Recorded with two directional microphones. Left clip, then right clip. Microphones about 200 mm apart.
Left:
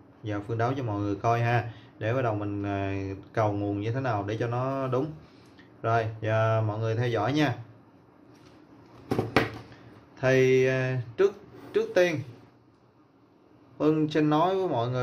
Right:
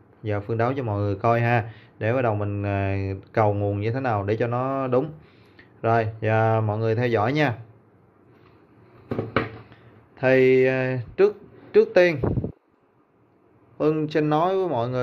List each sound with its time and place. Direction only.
0.2 s speech: 40° right (ahead or behind)
10.1 s speech: 40° right (ahead or behind)
13.7 s speech: 40° right (ahead or behind)